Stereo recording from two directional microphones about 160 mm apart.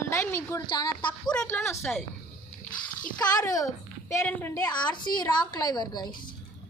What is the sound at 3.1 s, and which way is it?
A child's voice, 25° left (ahead or behind).